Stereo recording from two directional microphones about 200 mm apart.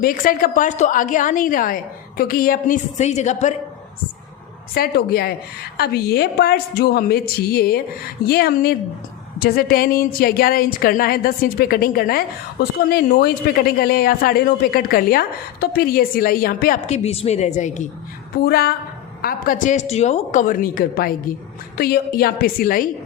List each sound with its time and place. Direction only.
0.0 s a woman's voice: 45° left (ahead or behind)
4.7 s a woman's voice: 50° left (ahead or behind)
16.8 s a woman's voice: 35° left (ahead or behind)
18.4 s a woman's voice: 50° left (ahead or behind)